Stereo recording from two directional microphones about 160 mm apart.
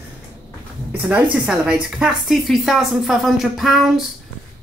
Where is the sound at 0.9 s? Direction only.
10° right (ahead or behind).